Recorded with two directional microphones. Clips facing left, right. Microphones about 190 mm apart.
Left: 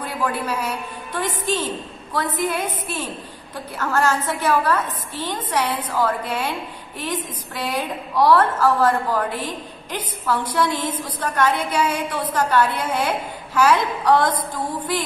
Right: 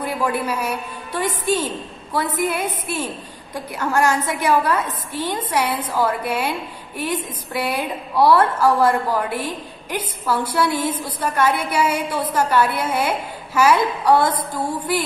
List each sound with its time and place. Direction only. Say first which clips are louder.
0.0 s a woman's voice: right 3 dB; 10° right (ahead or behind)